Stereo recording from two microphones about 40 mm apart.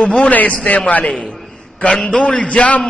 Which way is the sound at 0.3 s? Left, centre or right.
Left.